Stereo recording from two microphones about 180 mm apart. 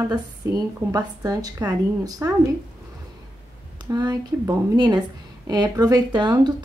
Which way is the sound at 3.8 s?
20° right (ahead or behind).